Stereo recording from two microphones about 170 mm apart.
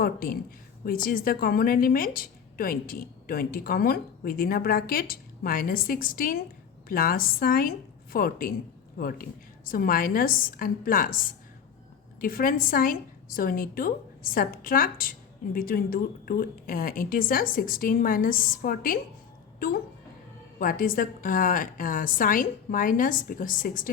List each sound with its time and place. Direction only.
0.0 s a woman's voice: 60° left (ahead or behind)